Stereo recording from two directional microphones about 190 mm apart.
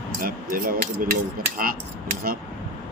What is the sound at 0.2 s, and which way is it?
Speech, 50° right (ahead or behind).